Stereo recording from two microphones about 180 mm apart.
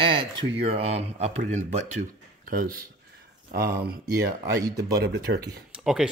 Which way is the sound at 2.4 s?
55° right (ahead or behind).